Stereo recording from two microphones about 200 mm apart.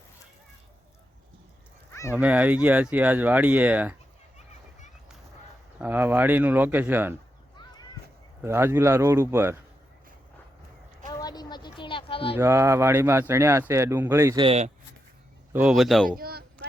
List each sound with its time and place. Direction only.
1.9 s a sound: 15° left (ahead or behind)
2.1 s speech: 5° right (ahead or behind)
5.8 s speech: 10° right (ahead or behind)
8.4 s speech: 10° right (ahead or behind)
11.1 s a sound: 20° left (ahead or behind)
12.4 s speech: 15° right (ahead or behind)
14.4 s speech: 30° right (ahead or behind)
15.5 s speech: centre (ahead or behind)
16.0 s a sound: 50° right (ahead or behind)